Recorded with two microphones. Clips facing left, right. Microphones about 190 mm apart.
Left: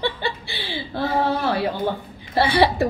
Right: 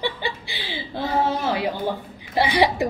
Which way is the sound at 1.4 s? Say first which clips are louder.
Left 2 dB; 15° right (ahead or behind).